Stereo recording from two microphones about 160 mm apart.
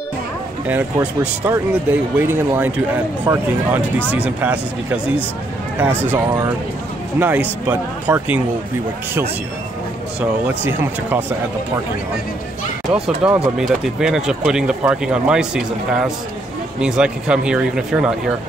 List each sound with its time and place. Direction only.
0.7 s speech: 10° right (ahead or behind)
10.4 s speech: 10° right (ahead or behind)
12.9 s speech: 10° right (ahead or behind)